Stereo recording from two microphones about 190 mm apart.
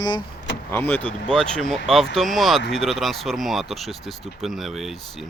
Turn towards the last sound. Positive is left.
turn(degrees=0)  # may be behind; listen again after turning